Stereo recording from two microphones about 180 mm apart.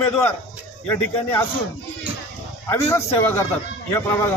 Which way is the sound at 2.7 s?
15° left (ahead or behind).